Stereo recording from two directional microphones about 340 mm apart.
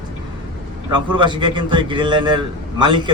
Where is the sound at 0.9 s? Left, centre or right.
Centre.